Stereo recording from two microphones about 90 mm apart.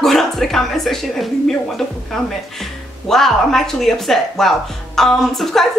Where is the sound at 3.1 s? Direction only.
5° left (ahead or behind).